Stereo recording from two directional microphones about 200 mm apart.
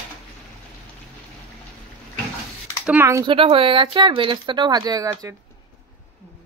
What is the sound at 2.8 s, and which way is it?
Speech, 10° right (ahead or behind).